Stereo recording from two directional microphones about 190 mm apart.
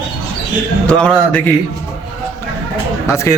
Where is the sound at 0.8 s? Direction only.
5° left (ahead or behind).